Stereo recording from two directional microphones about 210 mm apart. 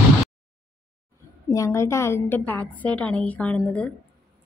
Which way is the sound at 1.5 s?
15° left (ahead or behind).